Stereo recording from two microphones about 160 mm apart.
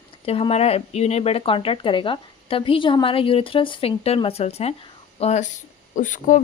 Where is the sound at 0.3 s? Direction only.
35° left (ahead or behind).